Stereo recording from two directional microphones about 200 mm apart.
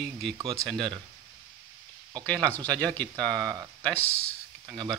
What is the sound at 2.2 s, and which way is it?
Speech, 5° left (ahead or behind).